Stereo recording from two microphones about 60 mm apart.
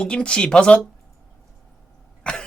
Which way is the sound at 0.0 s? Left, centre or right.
Centre.